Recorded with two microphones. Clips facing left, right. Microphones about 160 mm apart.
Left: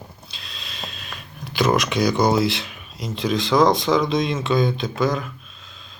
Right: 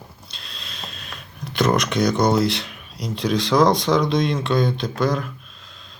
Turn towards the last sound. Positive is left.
turn(degrees=0)  # may be behind; listen again after turning